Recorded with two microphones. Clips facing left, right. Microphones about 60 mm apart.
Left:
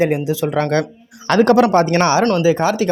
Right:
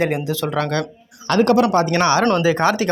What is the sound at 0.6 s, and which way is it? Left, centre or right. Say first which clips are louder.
Speech: left 4 dB; left.